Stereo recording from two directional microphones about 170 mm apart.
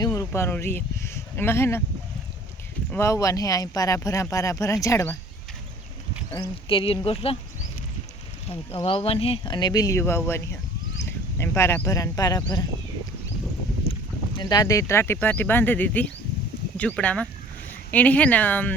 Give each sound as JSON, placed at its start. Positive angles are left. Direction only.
{"t": 0.0, "sound": "speech", "side_deg": 15}
{"t": 2.9, "sound": "speech", "side_deg": 15}
{"t": 6.7, "sound": "speech", "side_deg": 30}
{"t": 8.4, "sound": "speech", "side_deg": 35}
{"t": 14.3, "sound": "speech", "side_deg": 20}